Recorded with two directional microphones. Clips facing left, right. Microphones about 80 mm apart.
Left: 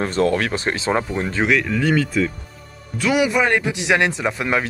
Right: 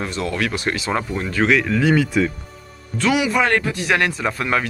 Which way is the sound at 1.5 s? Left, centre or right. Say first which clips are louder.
Right 2 dB; centre.